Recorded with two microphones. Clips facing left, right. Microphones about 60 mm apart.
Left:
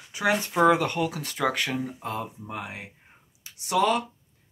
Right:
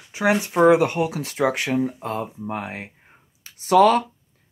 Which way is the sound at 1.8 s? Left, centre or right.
Right.